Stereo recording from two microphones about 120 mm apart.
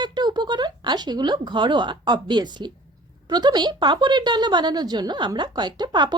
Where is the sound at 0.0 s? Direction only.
35° right (ahead or behind).